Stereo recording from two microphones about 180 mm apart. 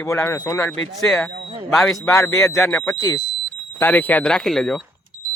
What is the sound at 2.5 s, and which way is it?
Speech, centre (ahead or behind).